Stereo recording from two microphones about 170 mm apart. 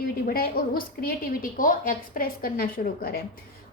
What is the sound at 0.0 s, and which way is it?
A woman's voice, 60° left (ahead or behind).